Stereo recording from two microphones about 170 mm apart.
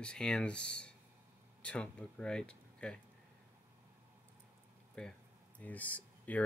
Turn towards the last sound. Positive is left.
turn(degrees=10)  # may be behind; listen again after turning